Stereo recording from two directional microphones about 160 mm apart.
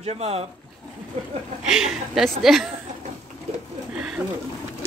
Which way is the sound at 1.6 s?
5° right (ahead or behind).